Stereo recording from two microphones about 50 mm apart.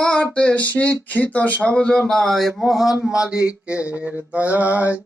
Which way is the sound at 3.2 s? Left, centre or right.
Right.